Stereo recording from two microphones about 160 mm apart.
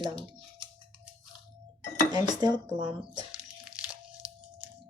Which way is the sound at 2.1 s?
25° right (ahead or behind).